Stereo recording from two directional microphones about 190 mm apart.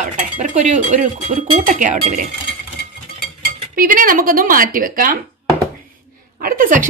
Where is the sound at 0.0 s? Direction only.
40° right (ahead or behind).